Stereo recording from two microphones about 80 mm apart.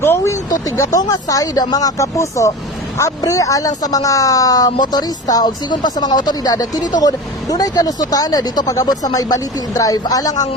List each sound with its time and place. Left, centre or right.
0.0 s speech: left
0.8 s speech: left